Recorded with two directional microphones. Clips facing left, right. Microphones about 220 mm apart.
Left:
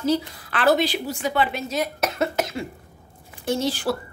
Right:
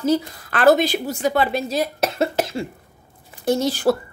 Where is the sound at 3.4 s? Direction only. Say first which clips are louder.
Right 5 dB; 40° right (ahead or behind).